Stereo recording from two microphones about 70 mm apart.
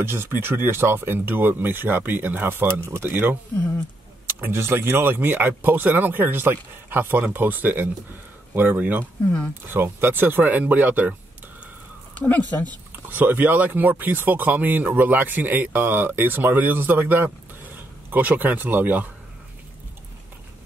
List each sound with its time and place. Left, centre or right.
0.0 s speech: right
13.1 s speech: right